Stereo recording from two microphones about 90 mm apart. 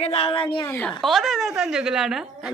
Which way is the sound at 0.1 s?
85° left.